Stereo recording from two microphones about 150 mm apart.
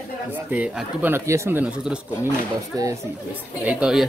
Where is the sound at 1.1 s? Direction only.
20° right (ahead or behind).